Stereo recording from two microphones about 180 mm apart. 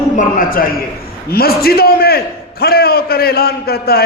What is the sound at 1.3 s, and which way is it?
A man's voice, 60° left (ahead or behind).